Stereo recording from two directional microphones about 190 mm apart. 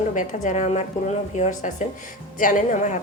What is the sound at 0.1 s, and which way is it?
A woman's voice, 40° left (ahead or behind).